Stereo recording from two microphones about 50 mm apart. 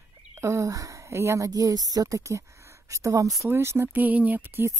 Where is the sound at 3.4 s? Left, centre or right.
Right.